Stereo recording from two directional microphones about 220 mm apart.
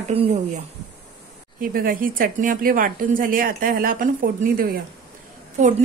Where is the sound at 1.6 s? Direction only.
40° right (ahead or behind).